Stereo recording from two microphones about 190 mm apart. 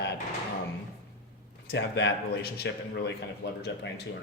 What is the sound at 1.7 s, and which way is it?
Speech, 60° left (ahead or behind).